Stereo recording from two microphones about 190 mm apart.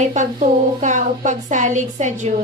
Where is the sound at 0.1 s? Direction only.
40° right (ahead or behind).